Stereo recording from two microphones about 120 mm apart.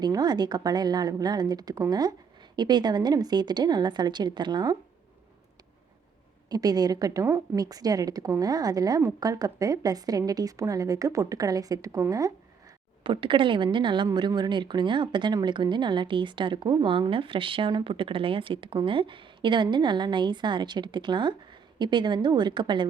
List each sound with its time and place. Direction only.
0.0 s speech: 35° right (ahead or behind)
6.5 s speech: 30° right (ahead or behind)
13.0 s speech: 45° right (ahead or behind)